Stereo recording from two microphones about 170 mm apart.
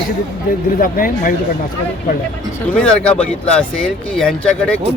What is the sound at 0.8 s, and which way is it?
Speech, 55° left (ahead or behind).